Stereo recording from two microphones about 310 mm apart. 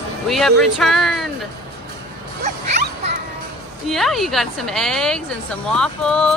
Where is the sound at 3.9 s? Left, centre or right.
Centre.